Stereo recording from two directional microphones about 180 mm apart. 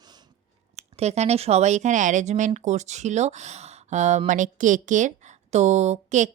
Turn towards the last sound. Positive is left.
turn(degrees=-40)  # may be behind; listen again after turning